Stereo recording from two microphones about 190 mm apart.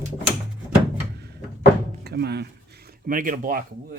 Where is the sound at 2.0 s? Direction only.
60° right (ahead or behind).